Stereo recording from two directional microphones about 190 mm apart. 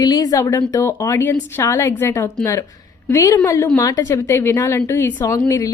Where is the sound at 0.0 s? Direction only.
20° left (ahead or behind).